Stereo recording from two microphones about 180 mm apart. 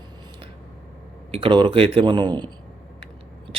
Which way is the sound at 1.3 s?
30° right (ahead or behind).